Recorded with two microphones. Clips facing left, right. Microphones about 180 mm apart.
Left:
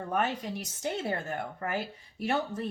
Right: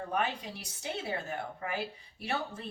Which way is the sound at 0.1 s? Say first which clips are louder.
Left 4 dB; 45° left (ahead or behind).